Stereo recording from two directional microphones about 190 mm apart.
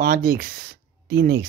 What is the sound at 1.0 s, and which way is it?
Speech, 65° right (ahead or behind).